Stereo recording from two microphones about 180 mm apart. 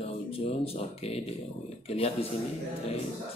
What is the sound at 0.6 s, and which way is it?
A man's voice, 35° left (ahead or behind).